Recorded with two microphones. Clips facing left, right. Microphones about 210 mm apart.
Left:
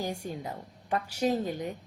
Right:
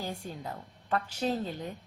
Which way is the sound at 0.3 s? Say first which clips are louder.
Left 3 dB; 15° left (ahead or behind).